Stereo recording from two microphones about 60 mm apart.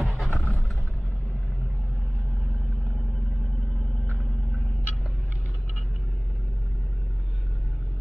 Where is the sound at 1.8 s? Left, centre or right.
Centre.